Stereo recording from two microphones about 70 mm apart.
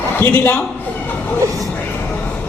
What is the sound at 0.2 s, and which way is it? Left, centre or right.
Speech, left.